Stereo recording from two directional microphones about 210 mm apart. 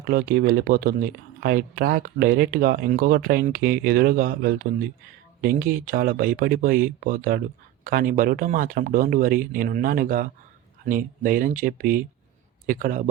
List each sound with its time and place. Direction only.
0.0 s speech: 45° right (ahead or behind)